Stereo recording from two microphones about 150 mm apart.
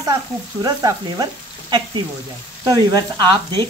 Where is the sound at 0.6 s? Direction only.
25° right (ahead or behind).